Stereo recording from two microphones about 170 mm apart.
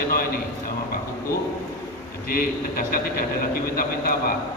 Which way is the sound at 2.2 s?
60° left (ahead or behind).